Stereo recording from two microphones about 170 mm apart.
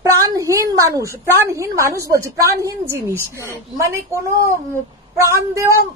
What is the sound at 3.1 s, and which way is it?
Speech, 15° left (ahead or behind).